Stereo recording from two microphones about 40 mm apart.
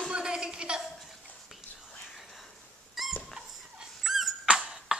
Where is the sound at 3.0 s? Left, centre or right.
Centre.